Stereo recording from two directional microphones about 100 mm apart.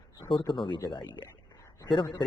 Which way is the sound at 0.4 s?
55° left (ahead or behind).